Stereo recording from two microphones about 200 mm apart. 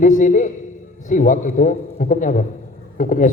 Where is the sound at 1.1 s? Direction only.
40° left (ahead or behind).